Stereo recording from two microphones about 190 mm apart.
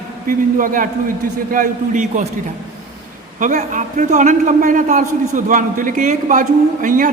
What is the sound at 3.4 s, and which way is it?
A man's voice, 40° right (ahead or behind).